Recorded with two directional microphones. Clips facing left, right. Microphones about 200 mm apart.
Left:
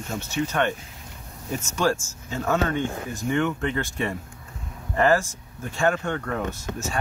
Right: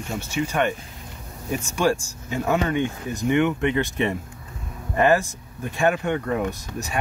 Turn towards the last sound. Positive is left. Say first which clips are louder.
# even
turn(degrees=-15)  # may be behind; listen again after turning